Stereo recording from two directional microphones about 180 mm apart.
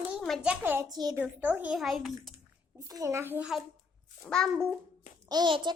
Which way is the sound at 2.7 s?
15° right (ahead or behind).